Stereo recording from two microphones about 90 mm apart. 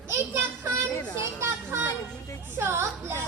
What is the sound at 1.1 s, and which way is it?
Children playing, 30° right (ahead or behind).